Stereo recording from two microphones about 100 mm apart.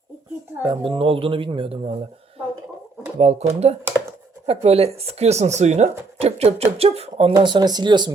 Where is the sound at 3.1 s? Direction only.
90° right.